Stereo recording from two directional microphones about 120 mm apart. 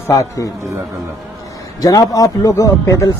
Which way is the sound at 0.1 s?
25° left (ahead or behind).